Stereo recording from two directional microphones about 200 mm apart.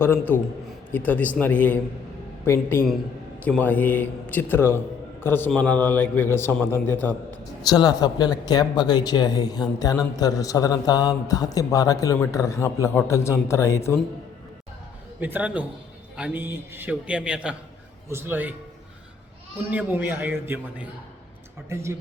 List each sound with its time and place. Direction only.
0.0 s a man's voice: 10° left (ahead or behind)
15.2 s a man's voice: 10° right (ahead or behind)
19.7 s a man's voice: 10° right (ahead or behind)